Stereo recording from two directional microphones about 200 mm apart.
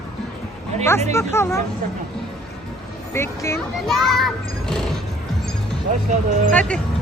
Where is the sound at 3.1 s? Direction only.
15° left (ahead or behind).